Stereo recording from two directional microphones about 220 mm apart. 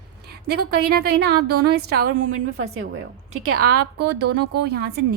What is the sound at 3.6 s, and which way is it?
A woman's voice, 45° right (ahead or behind).